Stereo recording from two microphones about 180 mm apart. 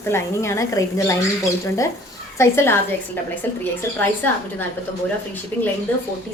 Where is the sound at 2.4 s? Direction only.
15° left (ahead or behind).